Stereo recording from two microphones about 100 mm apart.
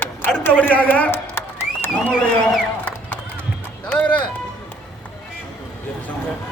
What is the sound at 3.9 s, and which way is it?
Speech, 15° left (ahead or behind).